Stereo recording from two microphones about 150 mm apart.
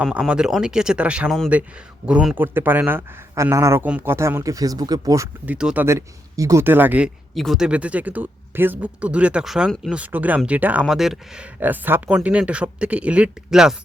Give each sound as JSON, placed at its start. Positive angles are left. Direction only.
{"t": 0.0, "sound": "speech", "side_deg": -5}
{"t": 5.5, "sound": "speech", "side_deg": -10}
{"t": 5.8, "sound": "speech", "side_deg": -20}
{"t": 7.3, "sound": "speech", "side_deg": 0}